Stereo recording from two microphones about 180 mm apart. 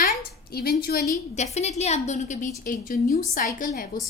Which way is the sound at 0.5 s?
60° left (ahead or behind).